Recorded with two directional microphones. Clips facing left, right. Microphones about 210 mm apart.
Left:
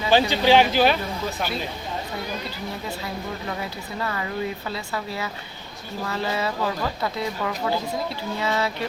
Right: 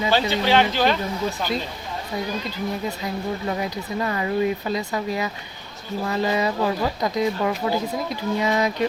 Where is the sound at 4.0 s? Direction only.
20° right (ahead or behind).